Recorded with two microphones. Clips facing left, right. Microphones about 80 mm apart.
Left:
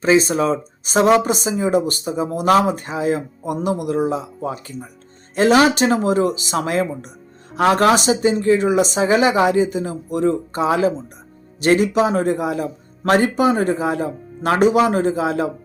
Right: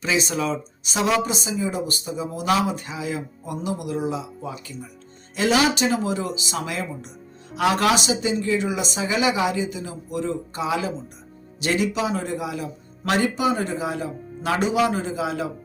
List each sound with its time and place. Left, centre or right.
0.0 s speech: left